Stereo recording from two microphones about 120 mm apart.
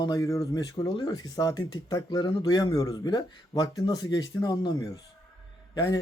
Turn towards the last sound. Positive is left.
turn(degrees=35)  # may be behind; listen again after turning